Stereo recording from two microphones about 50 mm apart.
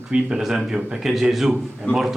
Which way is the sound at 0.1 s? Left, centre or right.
Centre.